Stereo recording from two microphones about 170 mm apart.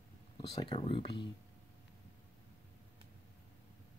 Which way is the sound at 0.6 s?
30° left (ahead or behind).